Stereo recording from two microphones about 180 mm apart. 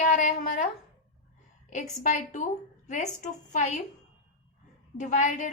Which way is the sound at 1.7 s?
45° left (ahead or behind).